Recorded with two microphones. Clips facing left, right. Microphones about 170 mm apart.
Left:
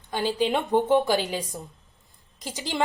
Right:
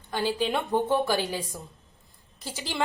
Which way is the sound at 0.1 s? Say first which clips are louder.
Left 2 dB; 20° left (ahead or behind).